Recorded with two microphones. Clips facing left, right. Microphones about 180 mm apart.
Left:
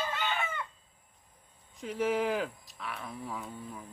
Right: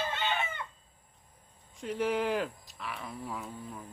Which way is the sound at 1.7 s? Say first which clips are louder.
Even; centre (ahead or behind).